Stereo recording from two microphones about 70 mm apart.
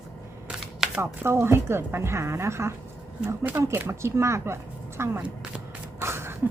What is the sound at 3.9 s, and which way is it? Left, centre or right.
Speech, right.